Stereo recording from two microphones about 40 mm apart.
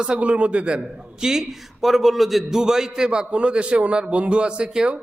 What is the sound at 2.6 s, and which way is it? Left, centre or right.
A man's voice, centre.